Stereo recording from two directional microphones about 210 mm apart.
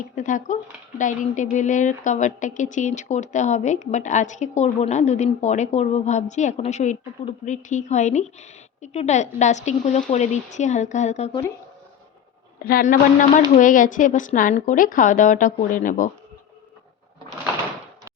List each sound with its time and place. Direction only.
0.2 s speech: 35° left (ahead or behind)
12.6 s speech: 40° left (ahead or behind)